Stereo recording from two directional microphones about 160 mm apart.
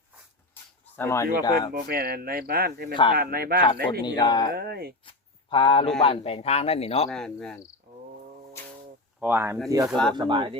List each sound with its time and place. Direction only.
0.9 s speech: 15° left (ahead or behind)
1.7 s speech: 70° right (ahead or behind)
2.9 s speech: 30° left (ahead or behind)
3.2 s speech: 70° right (ahead or behind)
4.0 s speech: 25° left (ahead or behind)
4.5 s speech: 80° right
5.0 s a sound: 30° left (ahead or behind)
6.0 s speech: 35° left (ahead or behind)
7.1 s cricket: 5° left (ahead or behind)
9.2 s speech: 15° right (ahead or behind)
9.9 s cricket: centre (ahead or behind)
10.2 s speech: 30° right (ahead or behind)